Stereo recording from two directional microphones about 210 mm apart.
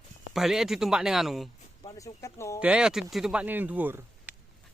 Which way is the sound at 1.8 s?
20° left (ahead or behind).